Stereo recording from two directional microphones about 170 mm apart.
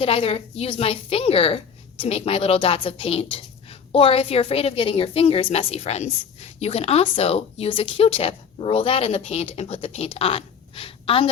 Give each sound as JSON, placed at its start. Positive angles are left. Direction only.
{"t": 0.0, "sound": "a woman's voice", "side_deg": 35}